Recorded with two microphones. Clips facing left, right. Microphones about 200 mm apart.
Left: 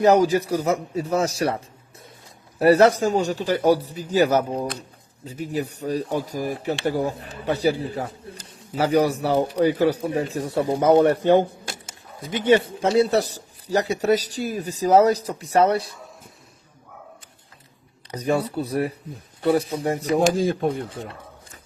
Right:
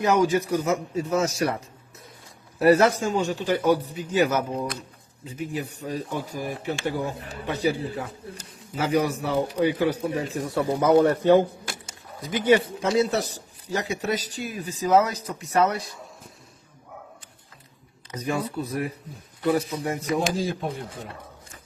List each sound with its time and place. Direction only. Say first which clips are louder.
0.0 s speech: left 4 dB; 35° left (ahead or behind)
18.1 s speech: left 5 dB; 35° left (ahead or behind)
20.1 s speech: left 8 dB; 55° left (ahead or behind)